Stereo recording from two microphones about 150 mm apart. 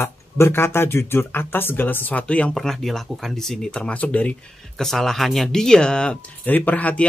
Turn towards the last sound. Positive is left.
turn(degrees=10)  # may be behind; listen again after turning